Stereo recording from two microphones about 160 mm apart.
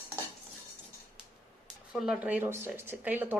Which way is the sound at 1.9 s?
5° right (ahead or behind).